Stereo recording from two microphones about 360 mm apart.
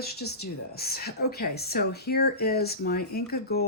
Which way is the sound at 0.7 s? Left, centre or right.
Left.